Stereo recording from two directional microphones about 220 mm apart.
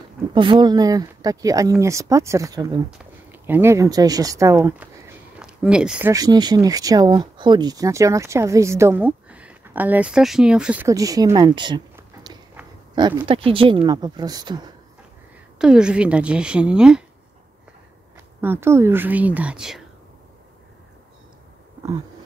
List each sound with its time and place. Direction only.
0.3 s speech: 20° right (ahead or behind); by 6.1 s 5° right (ahead or behind)
6.1 s speech: 20° right (ahead or behind)
15.6 s a woman's voice: 5° right (ahead or behind)
18.4 s speech: 10° right (ahead or behind)